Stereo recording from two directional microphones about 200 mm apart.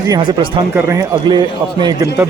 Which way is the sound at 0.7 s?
10° right (ahead or behind).